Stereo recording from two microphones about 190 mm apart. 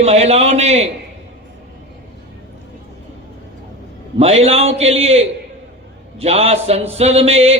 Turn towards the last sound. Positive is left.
turn(degrees=-35)  # may be behind; listen again after turning